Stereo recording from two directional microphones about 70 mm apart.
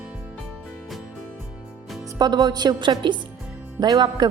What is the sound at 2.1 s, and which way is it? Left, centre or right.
A woman's voice, right.